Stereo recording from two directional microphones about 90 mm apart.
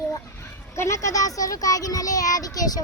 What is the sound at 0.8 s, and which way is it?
Speech, 35° left (ahead or behind).